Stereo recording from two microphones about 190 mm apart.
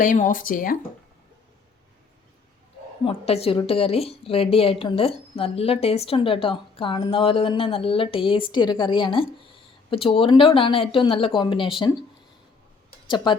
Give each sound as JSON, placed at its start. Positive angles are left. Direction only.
{"t": 0.0, "sound": "speech", "side_deg": 45}
{"t": 3.0, "sound": "a woman's voice", "side_deg": 30}
{"t": 13.1, "sound": "speech", "side_deg": 25}